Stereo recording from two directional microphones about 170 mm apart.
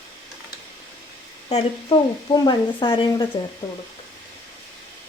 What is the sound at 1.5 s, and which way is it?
Speech, 30° left (ahead or behind).